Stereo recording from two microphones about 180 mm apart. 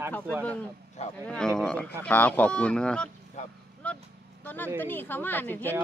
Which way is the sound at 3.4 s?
40° left (ahead or behind).